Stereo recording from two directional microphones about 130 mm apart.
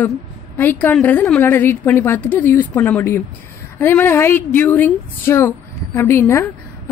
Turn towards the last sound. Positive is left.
turn(degrees=20)  # may be behind; listen again after turning